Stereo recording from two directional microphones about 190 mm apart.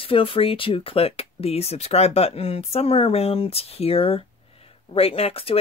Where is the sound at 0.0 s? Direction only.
30° left (ahead or behind).